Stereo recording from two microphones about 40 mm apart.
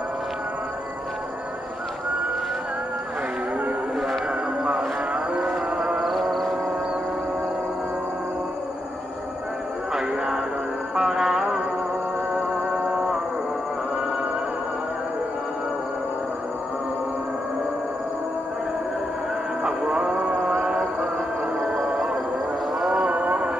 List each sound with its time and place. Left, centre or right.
4.7 s music: right
6.0 s music: centre
9.9 s music: centre
19.6 s music: right
21.9 s a sound: centre
22.9 s a sound: right